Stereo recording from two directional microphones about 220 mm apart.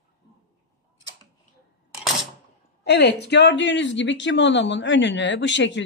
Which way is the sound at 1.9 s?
Centre (ahead or behind).